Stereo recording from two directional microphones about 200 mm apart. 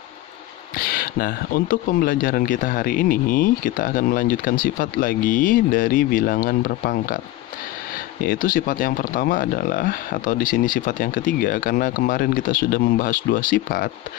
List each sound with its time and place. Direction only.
0.7 s speech: 45° left (ahead or behind)
8.3 s speech: 45° left (ahead or behind)